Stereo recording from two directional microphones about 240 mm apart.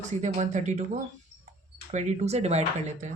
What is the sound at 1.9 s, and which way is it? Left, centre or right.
Speech, right.